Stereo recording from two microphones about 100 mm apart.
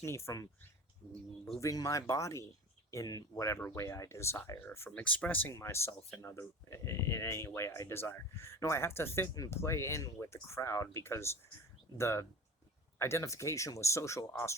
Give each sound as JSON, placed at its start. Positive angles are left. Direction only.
{"t": 0.0, "sound": "speech", "side_deg": 30}
{"t": 4.9, "sound": "speech", "side_deg": 15}